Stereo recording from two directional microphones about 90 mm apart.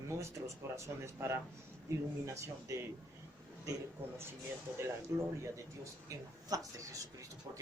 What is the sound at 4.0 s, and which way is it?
Speech, 25° right (ahead or behind).